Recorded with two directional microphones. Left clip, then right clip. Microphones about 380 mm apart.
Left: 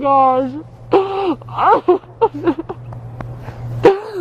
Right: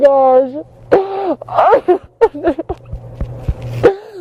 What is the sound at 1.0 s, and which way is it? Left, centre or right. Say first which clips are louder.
Groan: right 1 dB; centre.